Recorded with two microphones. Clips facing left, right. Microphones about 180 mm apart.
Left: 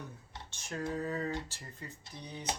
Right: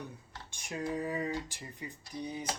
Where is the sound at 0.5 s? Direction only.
15° right (ahead or behind).